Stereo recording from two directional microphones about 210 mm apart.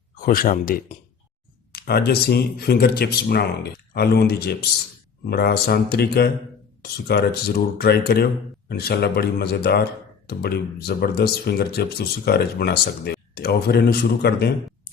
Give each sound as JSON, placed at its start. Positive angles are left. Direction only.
{"t": 0.3, "sound": "speech", "side_deg": 40}